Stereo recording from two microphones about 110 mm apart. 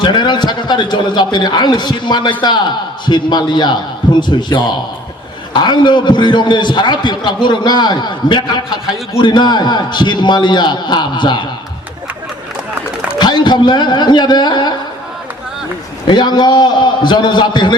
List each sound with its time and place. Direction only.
0.0 s a man's voice: 45° left (ahead or behind)
13.1 s a man's voice: 40° left (ahead or behind)
16.0 s a man's voice: 40° left (ahead or behind)